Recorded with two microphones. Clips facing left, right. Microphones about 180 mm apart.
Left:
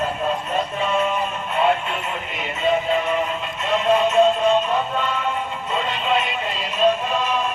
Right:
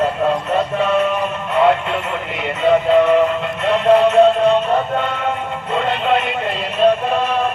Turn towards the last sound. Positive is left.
turn(degrees=-60)  # may be behind; listen again after turning